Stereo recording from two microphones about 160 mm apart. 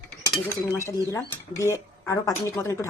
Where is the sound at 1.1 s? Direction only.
20° left (ahead or behind).